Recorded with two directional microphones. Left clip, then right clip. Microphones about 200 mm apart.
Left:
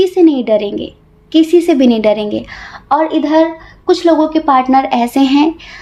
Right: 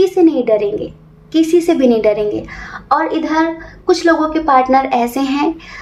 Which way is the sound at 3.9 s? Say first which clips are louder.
Left 2 dB; 40° left (ahead or behind).